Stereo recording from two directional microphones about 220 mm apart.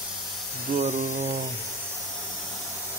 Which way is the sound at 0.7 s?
35° right (ahead or behind).